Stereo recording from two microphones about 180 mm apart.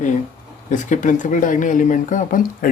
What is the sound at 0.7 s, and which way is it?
Speech, 45° left (ahead or behind).